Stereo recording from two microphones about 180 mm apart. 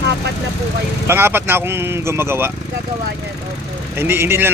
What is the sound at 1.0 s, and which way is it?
Speech, 10° right (ahead or behind).